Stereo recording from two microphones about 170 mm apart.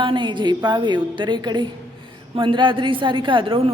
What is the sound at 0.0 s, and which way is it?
A man's voice, 30° right (ahead or behind).